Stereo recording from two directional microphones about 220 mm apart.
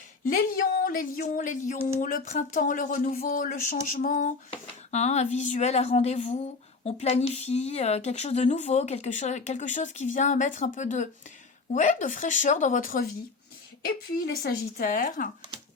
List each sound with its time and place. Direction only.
0.3 s speech: 40° left (ahead or behind)
14.4 s speech: 40° left (ahead or behind)